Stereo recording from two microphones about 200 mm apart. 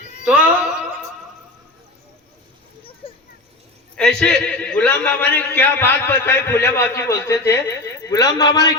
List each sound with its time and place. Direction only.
0.3 s a sound: 5° right (ahead or behind)
3.0 s children playing: 30° left (ahead or behind)
3.9 s a man's voice: 5° left (ahead or behind); by 8.7 s 20° left (ahead or behind)